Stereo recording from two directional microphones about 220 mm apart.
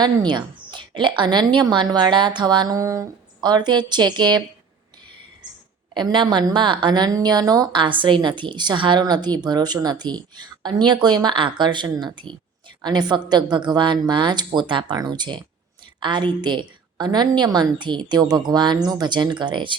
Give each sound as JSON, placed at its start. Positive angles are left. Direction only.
{"t": 0.0, "sound": "a woman's voice", "side_deg": -20}
{"t": 5.9, "sound": "a woman's voice", "side_deg": -20}